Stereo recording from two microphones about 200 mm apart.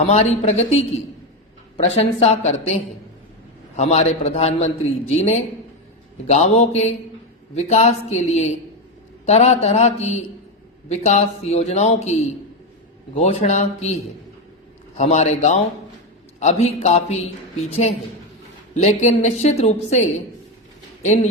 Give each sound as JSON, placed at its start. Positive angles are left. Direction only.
{"t": 0.0, "sound": "a man's voice", "side_deg": 30}